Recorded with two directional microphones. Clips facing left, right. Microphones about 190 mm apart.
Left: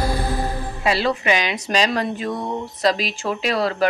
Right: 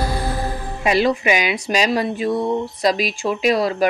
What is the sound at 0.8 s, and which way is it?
Speech, 15° right (ahead or behind).